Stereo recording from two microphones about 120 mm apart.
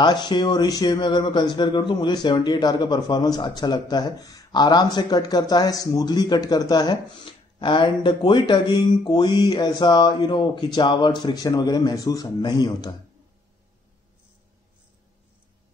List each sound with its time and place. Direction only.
0.0 s speech: 35° left (ahead or behind)